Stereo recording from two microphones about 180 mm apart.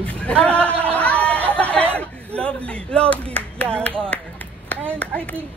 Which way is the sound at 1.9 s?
5° left (ahead or behind).